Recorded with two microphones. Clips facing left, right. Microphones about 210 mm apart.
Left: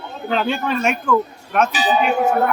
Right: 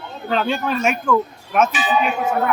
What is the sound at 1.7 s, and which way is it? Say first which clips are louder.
Tubular bells: left 3 dB; 35° left (ahead or behind).